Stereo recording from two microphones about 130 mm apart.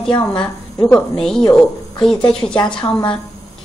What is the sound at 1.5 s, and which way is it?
A woman's voice, 5° left (ahead or behind).